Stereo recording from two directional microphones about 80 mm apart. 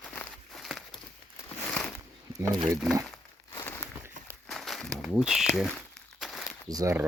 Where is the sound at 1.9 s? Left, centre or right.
Right.